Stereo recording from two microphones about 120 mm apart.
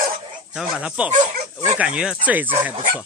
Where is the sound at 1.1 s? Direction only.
90° right.